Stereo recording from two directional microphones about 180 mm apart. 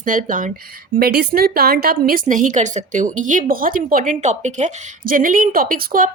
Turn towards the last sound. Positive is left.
turn(degrees=-50)  # may be behind; listen again after turning